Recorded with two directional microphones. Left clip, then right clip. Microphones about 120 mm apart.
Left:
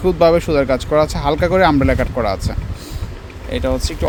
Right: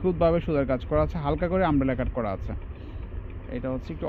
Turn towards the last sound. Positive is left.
turn(degrees=55)  # may be behind; listen again after turning